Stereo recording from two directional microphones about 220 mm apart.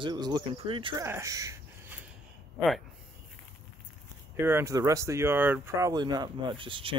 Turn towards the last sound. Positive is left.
turn(degrees=-25)  # may be behind; listen again after turning